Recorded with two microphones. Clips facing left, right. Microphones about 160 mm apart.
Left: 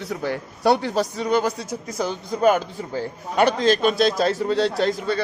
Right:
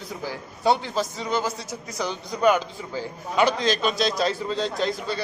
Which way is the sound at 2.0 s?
5° left (ahead or behind).